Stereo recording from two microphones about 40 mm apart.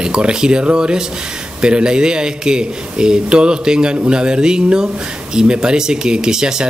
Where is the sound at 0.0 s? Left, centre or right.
Right.